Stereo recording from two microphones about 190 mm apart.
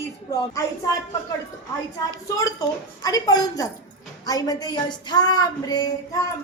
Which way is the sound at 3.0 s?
20° left (ahead or behind).